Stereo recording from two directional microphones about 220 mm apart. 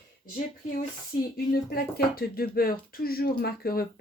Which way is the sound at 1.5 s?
45° left (ahead or behind).